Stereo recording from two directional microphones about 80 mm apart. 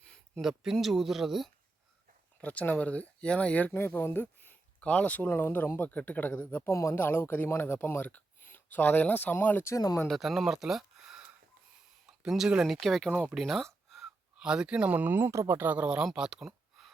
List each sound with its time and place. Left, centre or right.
0.0 s a sound: centre
0.4 s speech: centre
2.4 s speech: centre
6.7 s speech: left
7.0 s speech: left
9.7 s speech: left
10.1 s speech: centre
13.1 s speech: centre
13.3 s a sound: centre
14.3 s speech: centre; by 15.5 s right
15.5 s speech: right
16.1 s a sound: centre